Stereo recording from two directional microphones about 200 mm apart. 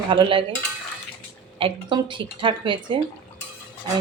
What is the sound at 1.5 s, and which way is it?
Speech, 25° right (ahead or behind).